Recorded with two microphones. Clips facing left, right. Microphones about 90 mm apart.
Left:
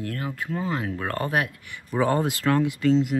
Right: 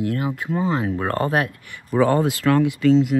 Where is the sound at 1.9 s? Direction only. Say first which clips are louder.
Right 5 dB; 90° right.